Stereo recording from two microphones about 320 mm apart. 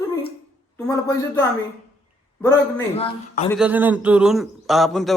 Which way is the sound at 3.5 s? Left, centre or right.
Centre.